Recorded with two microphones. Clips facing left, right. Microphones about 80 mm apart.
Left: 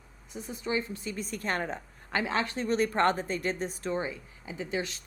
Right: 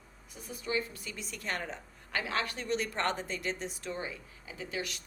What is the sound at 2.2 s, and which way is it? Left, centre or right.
Speech, left.